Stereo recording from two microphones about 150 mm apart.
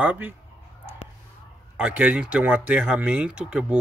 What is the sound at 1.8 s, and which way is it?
Speech, 10° right (ahead or behind).